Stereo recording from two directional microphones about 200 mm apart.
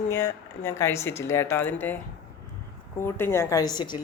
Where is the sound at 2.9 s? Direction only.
10° left (ahead or behind).